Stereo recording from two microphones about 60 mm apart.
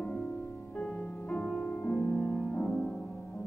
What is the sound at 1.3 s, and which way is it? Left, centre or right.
Music, centre.